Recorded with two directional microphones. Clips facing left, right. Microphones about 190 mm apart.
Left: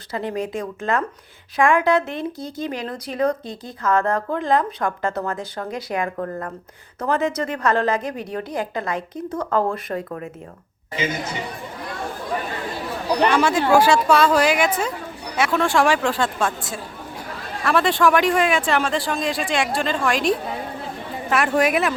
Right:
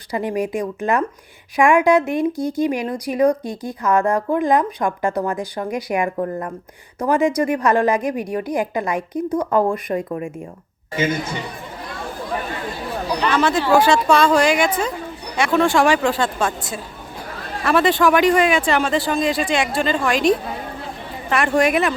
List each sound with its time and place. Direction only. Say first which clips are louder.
0.1 s a woman's voice: right 4 dB; 15° right (ahead or behind)
13.3 s speech: right 2 dB; 10° left (ahead or behind)